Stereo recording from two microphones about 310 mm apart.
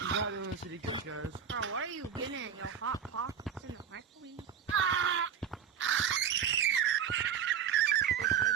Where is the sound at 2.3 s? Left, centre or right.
Right.